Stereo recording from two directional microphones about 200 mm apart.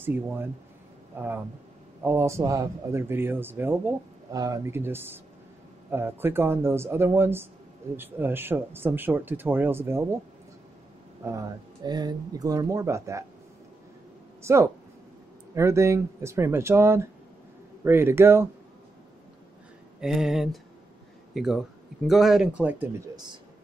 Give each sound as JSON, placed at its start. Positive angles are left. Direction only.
{"t": 0.0, "sound": "a man's voice", "side_deg": -10}
{"t": 11.2, "sound": "a man's voice", "side_deg": -15}
{"t": 14.4, "sound": "a man's voice", "side_deg": -15}
{"t": 20.0, "sound": "speech", "side_deg": 0}